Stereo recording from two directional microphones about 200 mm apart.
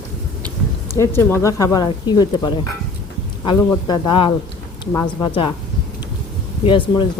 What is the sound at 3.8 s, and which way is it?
Speech, 20° left (ahead or behind).